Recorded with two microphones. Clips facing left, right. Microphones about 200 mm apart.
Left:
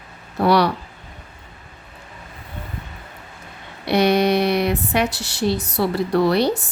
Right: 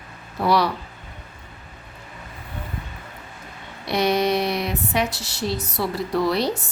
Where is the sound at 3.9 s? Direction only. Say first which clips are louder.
Left 4 dB; 65° left (ahead or behind).